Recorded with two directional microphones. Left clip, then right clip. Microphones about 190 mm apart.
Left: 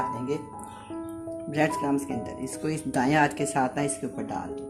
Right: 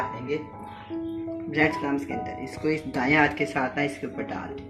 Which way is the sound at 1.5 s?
65° left (ahead or behind).